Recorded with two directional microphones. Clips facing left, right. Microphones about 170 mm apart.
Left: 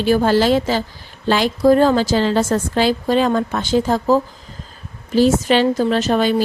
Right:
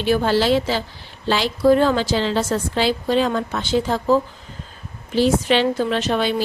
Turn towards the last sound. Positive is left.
turn(degrees=40)  # may be behind; listen again after turning